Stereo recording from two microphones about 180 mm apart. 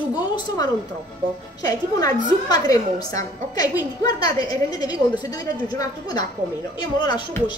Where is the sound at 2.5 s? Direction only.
20° left (ahead or behind).